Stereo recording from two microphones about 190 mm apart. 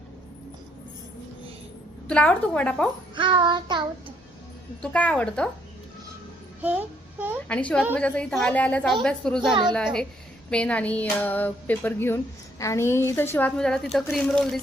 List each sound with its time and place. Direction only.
2.0 s a woman's voice: 5° left (ahead or behind)
3.2 s child singing: 25° right (ahead or behind)
4.8 s a woman's voice: 5° left (ahead or behind)
6.6 s a child's voice: 10° right (ahead or behind)
7.4 s a woman's voice: 5° left (ahead or behind)